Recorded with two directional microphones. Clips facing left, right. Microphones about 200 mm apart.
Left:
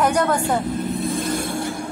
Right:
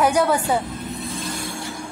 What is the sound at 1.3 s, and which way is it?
Vehicle, 55° left (ahead or behind).